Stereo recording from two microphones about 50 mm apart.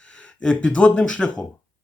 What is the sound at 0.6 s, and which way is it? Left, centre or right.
Speech, left.